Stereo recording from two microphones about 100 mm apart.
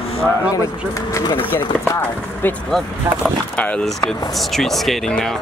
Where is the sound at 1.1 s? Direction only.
40° left (ahead or behind).